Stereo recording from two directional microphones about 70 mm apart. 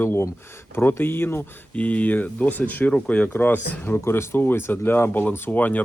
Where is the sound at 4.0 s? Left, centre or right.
Left.